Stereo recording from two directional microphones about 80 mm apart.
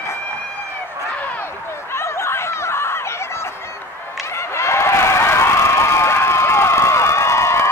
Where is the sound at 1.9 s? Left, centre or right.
Left.